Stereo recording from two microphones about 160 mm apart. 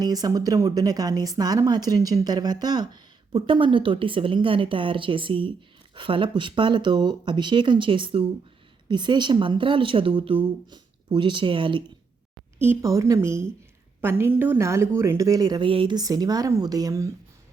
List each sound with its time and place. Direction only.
0.0 s a woman's voice: 25° right (ahead or behind)
12.5 s a woman's voice: 15° right (ahead or behind)